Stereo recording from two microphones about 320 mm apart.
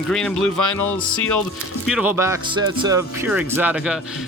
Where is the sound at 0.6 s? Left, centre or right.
Left.